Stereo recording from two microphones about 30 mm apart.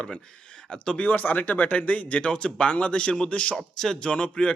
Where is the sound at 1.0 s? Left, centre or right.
Left.